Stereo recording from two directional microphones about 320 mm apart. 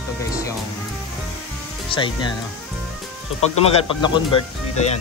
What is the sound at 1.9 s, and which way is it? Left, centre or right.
Speech, centre.